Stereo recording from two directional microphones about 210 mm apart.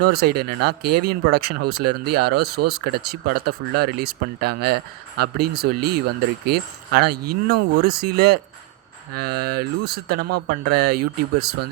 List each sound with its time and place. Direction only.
0.0 s speech: 50° right (ahead or behind)